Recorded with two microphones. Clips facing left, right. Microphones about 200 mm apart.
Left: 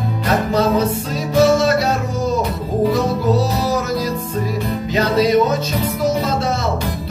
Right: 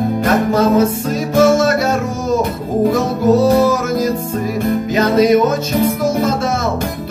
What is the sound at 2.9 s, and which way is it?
Music, 50° right (ahead or behind).